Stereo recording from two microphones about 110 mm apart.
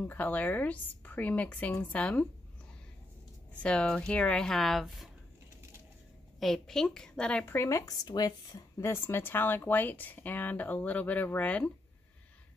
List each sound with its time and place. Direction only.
0.1 s a woman's voice: 15° left (ahead or behind)
3.6 s speech: 10° left (ahead or behind)
6.4 s a woman's voice: 5° left (ahead or behind)